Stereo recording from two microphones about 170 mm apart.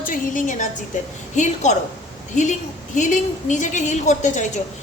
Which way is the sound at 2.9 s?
45° left (ahead or behind).